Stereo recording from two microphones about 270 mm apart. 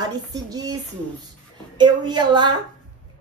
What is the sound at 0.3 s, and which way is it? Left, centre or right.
Speech, centre.